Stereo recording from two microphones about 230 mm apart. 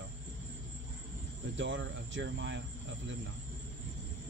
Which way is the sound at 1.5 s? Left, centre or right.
Right.